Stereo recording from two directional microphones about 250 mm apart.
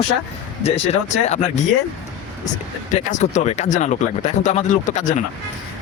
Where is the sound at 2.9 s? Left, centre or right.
Left.